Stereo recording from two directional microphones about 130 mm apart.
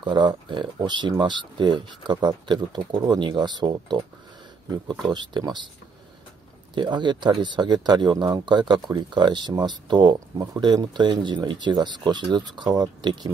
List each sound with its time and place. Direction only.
0.0 s speech: 35° right (ahead or behind)
5.0 s speech: 35° right (ahead or behind)
6.7 s speech: 35° right (ahead or behind)